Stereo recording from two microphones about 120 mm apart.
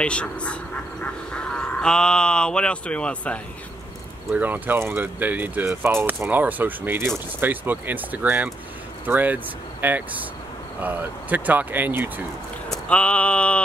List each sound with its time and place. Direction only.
0.0 s speech: 10° left (ahead or behind)
4.3 s speech: 15° right (ahead or behind)
12.6 s a sound: 5° left (ahead or behind)